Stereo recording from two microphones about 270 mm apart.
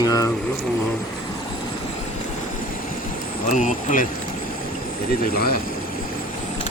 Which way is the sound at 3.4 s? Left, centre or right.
Left.